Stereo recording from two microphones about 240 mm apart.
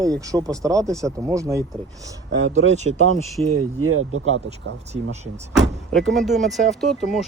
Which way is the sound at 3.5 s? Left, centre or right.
Right.